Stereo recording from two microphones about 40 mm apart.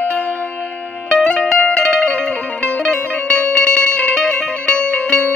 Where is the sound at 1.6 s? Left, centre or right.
Left.